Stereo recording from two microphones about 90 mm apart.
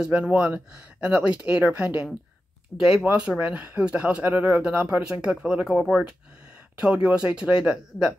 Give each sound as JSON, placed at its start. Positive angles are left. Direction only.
{"t": 0.0, "sound": "speech", "side_deg": -15}